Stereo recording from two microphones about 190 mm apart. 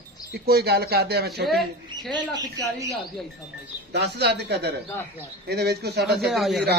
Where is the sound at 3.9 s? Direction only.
60° right (ahead or behind).